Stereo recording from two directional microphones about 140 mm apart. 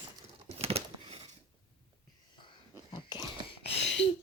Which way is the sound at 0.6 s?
45° right (ahead or behind).